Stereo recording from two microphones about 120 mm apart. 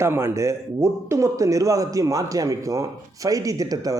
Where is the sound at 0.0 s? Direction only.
20° right (ahead or behind).